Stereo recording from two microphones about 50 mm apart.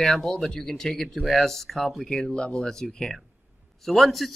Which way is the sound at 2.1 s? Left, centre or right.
Centre.